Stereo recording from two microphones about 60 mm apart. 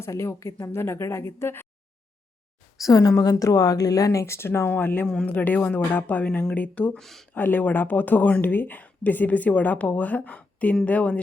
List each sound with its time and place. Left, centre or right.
0.0 s a woman's voice: left
2.8 s a woman's voice: left
4.4 s a woman's voice: left
4.7 s speech: left
7.0 s speech: centre
7.3 s speech: left